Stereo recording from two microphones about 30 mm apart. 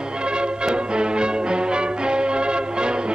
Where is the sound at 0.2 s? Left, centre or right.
Right.